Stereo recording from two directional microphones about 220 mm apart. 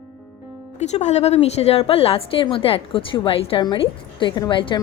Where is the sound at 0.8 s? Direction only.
30° left (ahead or behind).